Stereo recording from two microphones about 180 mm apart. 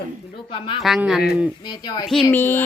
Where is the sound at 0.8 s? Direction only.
Centre (ahead or behind).